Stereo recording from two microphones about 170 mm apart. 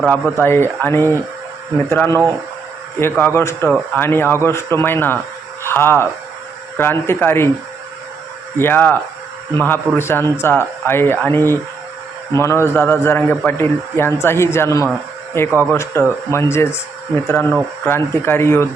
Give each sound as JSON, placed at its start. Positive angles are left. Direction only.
{"t": 0.1, "sound": "a man's voice", "side_deg": 10}
{"t": 8.5, "sound": "a man's voice", "side_deg": 10}
{"t": 15.4, "sound": "speech", "side_deg": -15}
{"t": 16.0, "sound": "a man's voice", "side_deg": 15}